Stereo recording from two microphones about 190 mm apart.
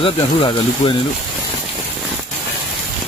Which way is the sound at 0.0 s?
25° left (ahead or behind).